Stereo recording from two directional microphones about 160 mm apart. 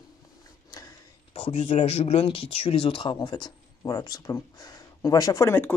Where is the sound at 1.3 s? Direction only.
40° left (ahead or behind).